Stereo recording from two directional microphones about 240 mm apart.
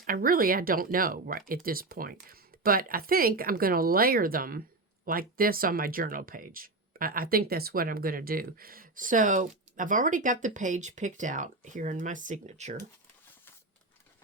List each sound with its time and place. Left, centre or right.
0.0 s speech: right